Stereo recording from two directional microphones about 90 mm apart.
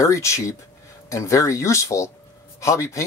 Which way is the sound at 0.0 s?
35° left (ahead or behind).